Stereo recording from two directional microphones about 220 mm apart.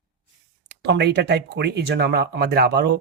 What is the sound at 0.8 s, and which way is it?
Speech, 50° right (ahead or behind).